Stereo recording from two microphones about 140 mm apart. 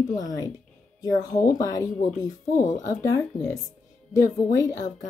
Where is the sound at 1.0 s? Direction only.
25° left (ahead or behind).